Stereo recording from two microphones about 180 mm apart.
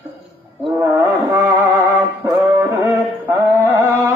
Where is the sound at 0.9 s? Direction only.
20° right (ahead or behind).